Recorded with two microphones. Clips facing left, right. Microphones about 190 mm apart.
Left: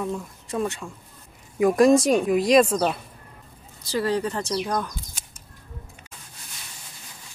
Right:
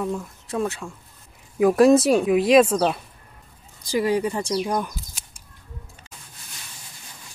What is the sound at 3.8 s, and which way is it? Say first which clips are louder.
Speech: right 3 dB; 15° right (ahead or behind).